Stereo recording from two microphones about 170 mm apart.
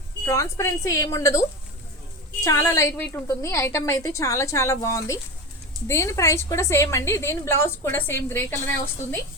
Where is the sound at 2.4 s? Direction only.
20° left (ahead or behind).